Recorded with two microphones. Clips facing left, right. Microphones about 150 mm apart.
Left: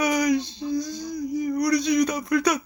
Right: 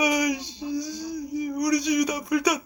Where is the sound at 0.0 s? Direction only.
15° right (ahead or behind).